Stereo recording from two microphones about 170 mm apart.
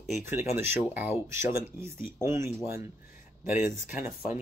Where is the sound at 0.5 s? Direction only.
15° right (ahead or behind).